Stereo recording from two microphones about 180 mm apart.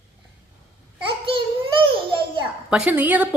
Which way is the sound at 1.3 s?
30° right (ahead or behind).